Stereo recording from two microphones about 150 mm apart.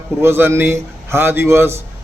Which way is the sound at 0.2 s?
15° right (ahead or behind).